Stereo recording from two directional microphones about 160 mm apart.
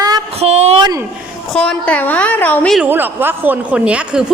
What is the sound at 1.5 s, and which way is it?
A woman's voice, 5° left (ahead or behind).